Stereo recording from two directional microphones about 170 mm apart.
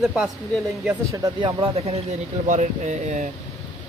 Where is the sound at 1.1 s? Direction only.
25° right (ahead or behind); by 3.2 s 45° right (ahead or behind).